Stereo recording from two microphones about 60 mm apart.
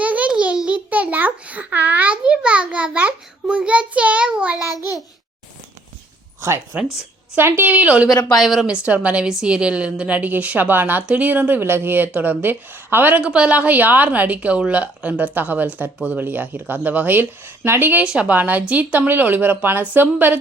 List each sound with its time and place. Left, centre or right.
0.0 s a sound: right
6.7 s a woman's voice: right
8.4 s a woman's voice: centre
8.6 s a woman's voice: centre
13.2 s a woman's voice: centre; by 18.0 s right
18.0 s a woman's voice: centre
18.3 s a woman's voice: right